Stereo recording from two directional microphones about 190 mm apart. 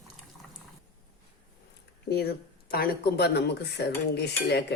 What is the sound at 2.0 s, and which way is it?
Speech, 55° left (ahead or behind).